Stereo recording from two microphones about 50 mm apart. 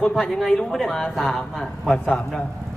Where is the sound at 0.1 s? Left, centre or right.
Centre.